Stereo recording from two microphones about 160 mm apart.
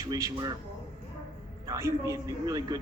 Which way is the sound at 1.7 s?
20° right (ahead or behind).